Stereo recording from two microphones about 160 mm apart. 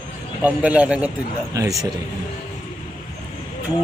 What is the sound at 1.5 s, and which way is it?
Speech, 20° right (ahead or behind).